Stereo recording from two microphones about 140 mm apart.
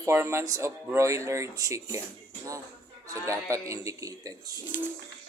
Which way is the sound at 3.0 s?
20° right (ahead or behind).